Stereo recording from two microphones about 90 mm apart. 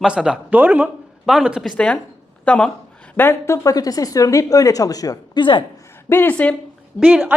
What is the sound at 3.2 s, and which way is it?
Speech, 30° left (ahead or behind).